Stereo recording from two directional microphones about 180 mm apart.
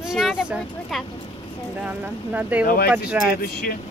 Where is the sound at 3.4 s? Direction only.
60° left (ahead or behind).